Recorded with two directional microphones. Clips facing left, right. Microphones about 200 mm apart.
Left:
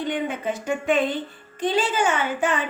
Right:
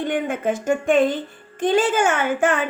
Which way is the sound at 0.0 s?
50° right (ahead or behind).